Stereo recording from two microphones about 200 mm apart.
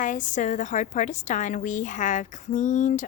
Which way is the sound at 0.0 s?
40° left (ahead or behind).